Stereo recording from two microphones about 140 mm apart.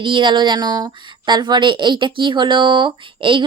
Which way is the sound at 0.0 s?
35° right (ahead or behind).